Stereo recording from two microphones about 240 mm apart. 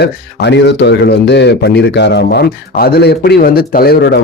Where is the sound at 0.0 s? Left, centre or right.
Left.